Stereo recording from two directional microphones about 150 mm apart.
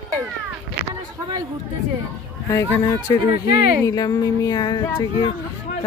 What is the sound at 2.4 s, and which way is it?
Speech, 20° left (ahead or behind).